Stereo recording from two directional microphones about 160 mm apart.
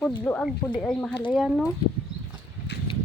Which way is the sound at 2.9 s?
30° left (ahead or behind).